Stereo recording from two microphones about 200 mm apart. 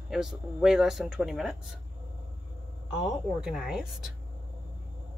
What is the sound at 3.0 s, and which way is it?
Speech, centre (ahead or behind).